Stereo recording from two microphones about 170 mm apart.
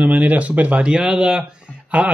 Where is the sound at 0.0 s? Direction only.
10° right (ahead or behind).